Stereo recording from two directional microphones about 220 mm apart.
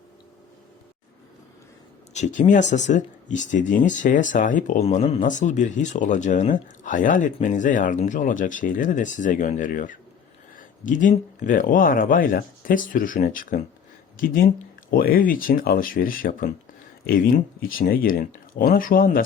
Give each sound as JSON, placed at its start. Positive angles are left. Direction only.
{"t": 2.1, "sound": "speech", "side_deg": 30}